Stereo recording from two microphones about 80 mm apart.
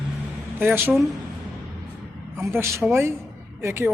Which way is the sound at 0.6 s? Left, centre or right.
Right.